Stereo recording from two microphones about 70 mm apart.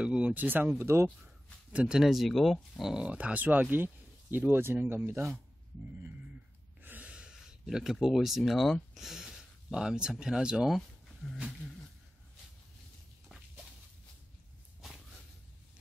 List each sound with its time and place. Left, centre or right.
0.0 s speech: centre
0.8 s speech: right
1.7 s speech: centre
2.9 s speech: centre; by 5.3 s right
6.8 s gasp: right
7.6 s speech: centre